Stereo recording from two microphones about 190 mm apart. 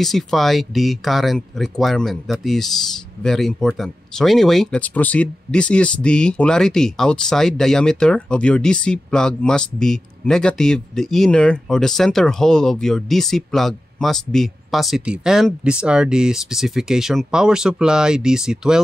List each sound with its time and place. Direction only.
0.0 s speech: centre (ahead or behind)